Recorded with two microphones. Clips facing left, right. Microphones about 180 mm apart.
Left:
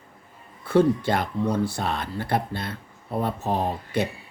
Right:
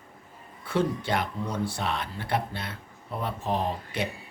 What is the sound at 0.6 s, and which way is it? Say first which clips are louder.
Speech: left 8 dB; 40° left (ahead or behind).